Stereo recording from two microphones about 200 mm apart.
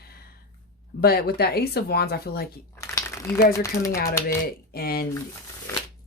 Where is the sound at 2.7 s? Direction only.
15° left (ahead or behind).